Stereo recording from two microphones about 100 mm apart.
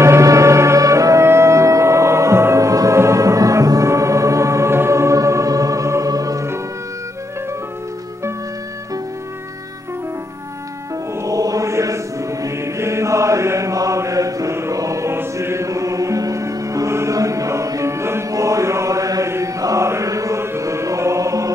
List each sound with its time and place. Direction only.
0.0 s music: 30° right (ahead or behind)
11.2 s mantra: 35° right (ahead or behind)
12.4 s chant: 30° right (ahead or behind)